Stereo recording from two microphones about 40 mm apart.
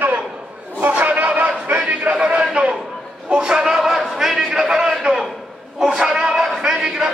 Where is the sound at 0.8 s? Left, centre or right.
Right.